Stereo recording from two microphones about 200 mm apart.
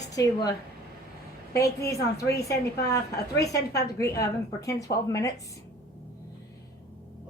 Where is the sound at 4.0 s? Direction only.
15° left (ahead or behind).